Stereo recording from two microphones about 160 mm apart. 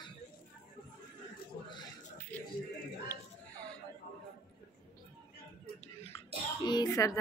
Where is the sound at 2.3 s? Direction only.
10° left (ahead or behind).